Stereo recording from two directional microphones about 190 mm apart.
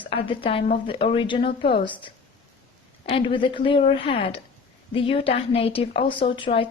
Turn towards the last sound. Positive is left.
turn(degrees=30)  # may be behind; listen again after turning